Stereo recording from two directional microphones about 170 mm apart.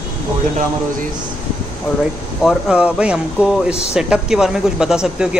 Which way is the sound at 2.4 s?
Centre (ahead or behind).